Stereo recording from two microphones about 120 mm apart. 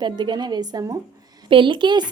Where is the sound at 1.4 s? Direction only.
45° right (ahead or behind).